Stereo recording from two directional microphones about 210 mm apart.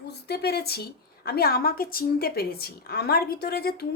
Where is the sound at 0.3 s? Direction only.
50° left (ahead or behind).